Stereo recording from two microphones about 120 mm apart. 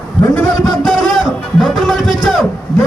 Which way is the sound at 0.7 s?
Centre (ahead or behind).